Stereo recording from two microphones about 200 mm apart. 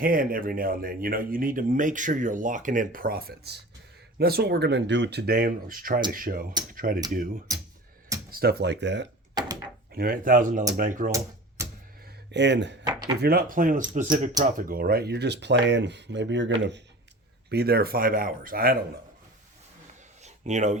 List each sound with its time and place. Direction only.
0.0 s speech: 45° right (ahead or behind)
7.5 s music: 15° right (ahead or behind)
8.3 s speech: 50° right (ahead or behind)
9.9 s speech: 45° right (ahead or behind)
11.1 s typewriter: 15° right (ahead or behind)
12.0 s a sound: 60° right (ahead or behind)
12.8 s drawer open or close: 20° right (ahead or behind)
13.1 s speech: 50° right (ahead or behind)
17.5 s speech: 50° right (ahead or behind)
20.2 s a sound: 35° right (ahead or behind)